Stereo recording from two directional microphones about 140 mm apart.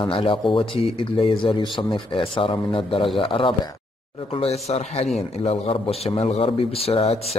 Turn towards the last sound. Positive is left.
turn(degrees=45)  # may be behind; listen again after turning